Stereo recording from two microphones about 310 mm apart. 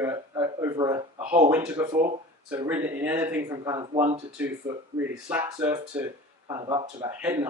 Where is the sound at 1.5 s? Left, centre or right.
Centre.